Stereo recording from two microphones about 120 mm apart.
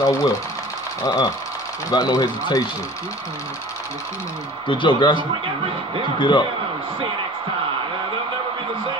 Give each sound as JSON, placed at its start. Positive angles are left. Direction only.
{"t": 0.0, "sound": "speech", "side_deg": 25}
{"t": 4.6, "sound": "speech", "side_deg": 40}